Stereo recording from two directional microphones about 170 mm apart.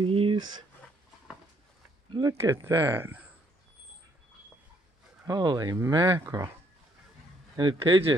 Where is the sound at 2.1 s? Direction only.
25° right (ahead or behind).